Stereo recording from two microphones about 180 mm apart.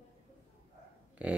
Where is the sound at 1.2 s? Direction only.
10° right (ahead or behind).